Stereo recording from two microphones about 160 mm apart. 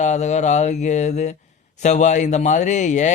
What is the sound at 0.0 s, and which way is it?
Speech, 45° left (ahead or behind).